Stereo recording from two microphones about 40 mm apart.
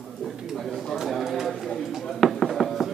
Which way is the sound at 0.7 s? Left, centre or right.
Centre.